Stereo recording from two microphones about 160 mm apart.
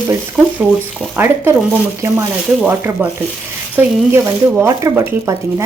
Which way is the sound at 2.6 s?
10° right (ahead or behind).